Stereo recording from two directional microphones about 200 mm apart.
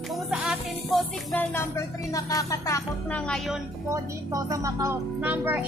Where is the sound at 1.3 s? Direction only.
15° left (ahead or behind).